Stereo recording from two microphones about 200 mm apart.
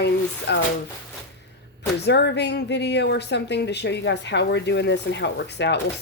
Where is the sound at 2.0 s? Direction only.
60° left (ahead or behind).